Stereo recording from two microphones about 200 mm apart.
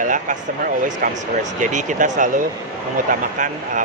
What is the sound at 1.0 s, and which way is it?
Speech, 45° right (ahead or behind).